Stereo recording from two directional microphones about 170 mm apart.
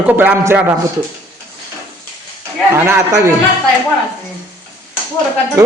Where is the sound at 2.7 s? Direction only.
15° right (ahead or behind).